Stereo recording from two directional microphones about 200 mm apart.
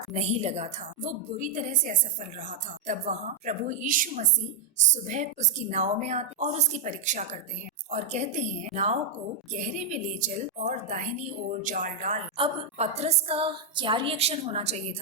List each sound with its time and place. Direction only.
0.1 s a woman's voice: 35° right (ahead or behind)